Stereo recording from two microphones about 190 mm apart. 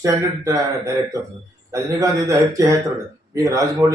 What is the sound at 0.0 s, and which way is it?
Speech, 15° right (ahead or behind).